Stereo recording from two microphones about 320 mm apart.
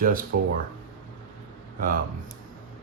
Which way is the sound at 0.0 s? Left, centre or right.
Right.